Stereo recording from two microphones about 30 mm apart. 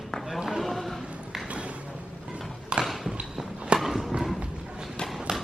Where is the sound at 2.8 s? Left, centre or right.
Centre.